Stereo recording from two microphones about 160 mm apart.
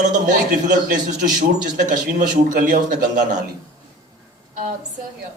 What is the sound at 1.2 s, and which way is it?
A woman's voice, 55° right (ahead or behind).